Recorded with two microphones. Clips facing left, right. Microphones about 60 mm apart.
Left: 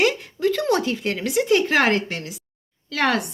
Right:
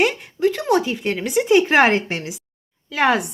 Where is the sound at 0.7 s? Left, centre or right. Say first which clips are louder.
Right 2 dB; centre.